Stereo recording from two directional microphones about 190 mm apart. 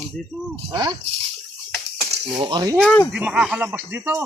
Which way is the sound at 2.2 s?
25° right (ahead or behind).